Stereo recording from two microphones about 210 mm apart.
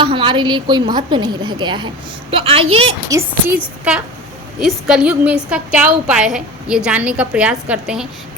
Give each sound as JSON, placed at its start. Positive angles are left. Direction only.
{"t": 0.0, "sound": "a woman's voice", "side_deg": -25}
{"t": 3.1, "sound": "a woman's voice", "side_deg": -10}